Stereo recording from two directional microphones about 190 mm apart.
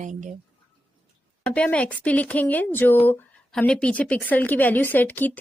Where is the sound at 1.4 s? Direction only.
5° left (ahead or behind).